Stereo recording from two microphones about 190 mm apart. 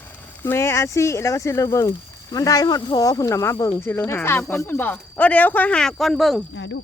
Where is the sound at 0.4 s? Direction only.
15° left (ahead or behind).